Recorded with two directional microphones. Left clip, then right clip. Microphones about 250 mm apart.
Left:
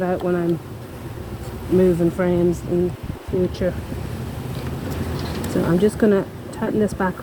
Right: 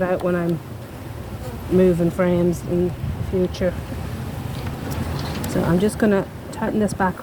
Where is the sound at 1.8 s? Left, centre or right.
Right.